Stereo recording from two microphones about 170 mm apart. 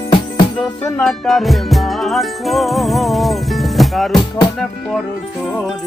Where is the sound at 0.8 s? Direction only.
5° left (ahead or behind).